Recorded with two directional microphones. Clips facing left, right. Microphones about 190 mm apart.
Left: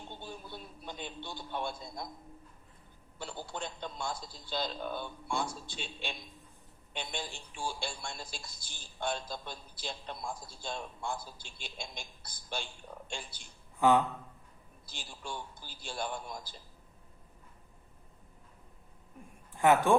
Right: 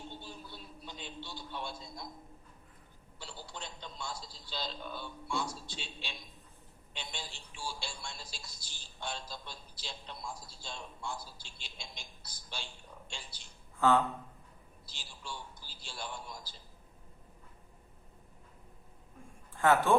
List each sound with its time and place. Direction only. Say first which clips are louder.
0.1 s a sound: left 3 dB; 50° left (ahead or behind)
3.2 s speech: left 6 dB; 50° left (ahead or behind)
13.7 s speech: left 2 dB; 15° left (ahead or behind)
14.8 s speech: left 4 dB; 50° left (ahead or behind)
19.5 s speech: left 2 dB; 15° left (ahead or behind)